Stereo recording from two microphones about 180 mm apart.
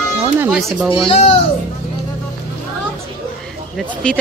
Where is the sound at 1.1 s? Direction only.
35° left (ahead or behind).